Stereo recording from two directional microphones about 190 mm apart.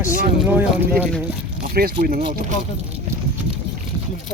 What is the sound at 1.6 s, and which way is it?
Speech, 55° right (ahead or behind).